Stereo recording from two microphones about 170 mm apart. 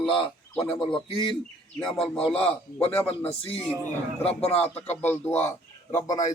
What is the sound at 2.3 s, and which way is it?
Speech, 5° left (ahead or behind).